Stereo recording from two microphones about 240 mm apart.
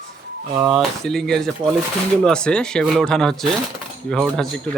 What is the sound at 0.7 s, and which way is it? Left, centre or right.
Speech, centre.